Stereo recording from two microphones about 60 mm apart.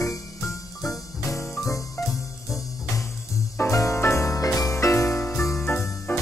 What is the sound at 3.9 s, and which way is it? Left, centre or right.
Music, left.